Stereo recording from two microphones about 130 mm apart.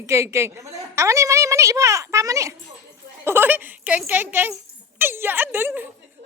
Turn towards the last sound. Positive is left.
turn(degrees=-15)  # may be behind; listen again after turning